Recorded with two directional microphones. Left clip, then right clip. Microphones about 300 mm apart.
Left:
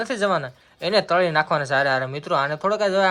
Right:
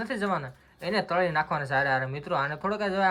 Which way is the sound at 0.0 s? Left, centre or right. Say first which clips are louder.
Left 8 dB; centre.